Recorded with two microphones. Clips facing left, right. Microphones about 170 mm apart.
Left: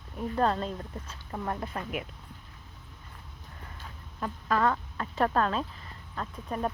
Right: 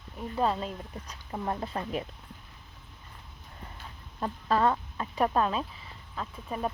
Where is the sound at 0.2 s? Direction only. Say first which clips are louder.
Left 1 dB; 5° right (ahead or behind); by 2.0 s 30° right (ahead or behind).